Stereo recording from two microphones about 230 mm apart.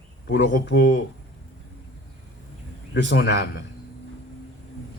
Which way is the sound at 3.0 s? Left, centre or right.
Left.